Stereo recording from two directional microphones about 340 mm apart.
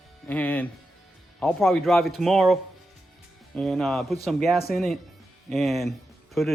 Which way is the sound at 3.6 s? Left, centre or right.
Centre.